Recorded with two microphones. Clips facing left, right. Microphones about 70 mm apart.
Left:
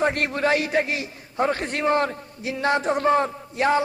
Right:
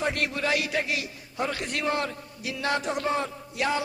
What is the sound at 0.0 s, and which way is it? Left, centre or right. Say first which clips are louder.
A man's voice: left 6 dB; left.